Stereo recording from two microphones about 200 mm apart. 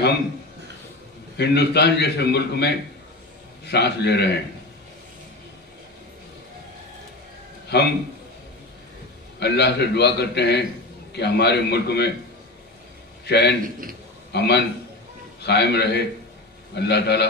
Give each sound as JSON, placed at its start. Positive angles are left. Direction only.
{"t": 1.3, "sound": "a man's voice", "side_deg": 55}
{"t": 7.6, "sound": "a man's voice", "side_deg": 55}
{"t": 9.4, "sound": "a man's voice", "side_deg": 55}
{"t": 13.2, "sound": "a man's voice", "side_deg": 55}